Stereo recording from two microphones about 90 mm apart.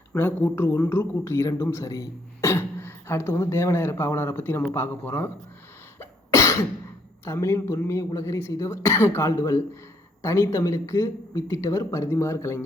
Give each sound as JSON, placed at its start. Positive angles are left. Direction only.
{"t": 0.1, "sound": "speech", "side_deg": 25}
{"t": 6.0, "sound": "cough", "side_deg": 30}
{"t": 7.3, "sound": "speech", "side_deg": 30}